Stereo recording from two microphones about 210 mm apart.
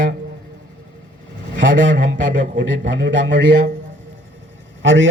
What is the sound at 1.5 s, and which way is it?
A man's voice, 60° right (ahead or behind).